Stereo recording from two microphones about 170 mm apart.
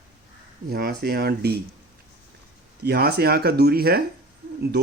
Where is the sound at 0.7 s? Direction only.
65° right (ahead or behind).